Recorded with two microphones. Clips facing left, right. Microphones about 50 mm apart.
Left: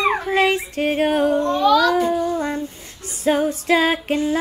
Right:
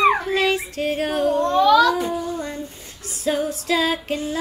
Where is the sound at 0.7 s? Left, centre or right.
Left.